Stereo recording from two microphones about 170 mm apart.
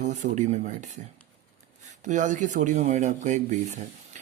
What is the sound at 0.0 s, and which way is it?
Speech, 45° right (ahead or behind).